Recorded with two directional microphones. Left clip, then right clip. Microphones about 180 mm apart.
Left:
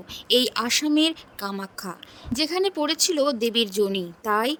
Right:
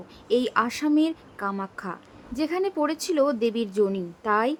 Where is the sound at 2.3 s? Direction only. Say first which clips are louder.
Left 2 dB; 50° left (ahead or behind).